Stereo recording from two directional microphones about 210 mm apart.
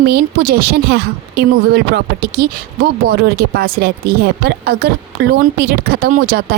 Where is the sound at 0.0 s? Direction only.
50° right (ahead or behind).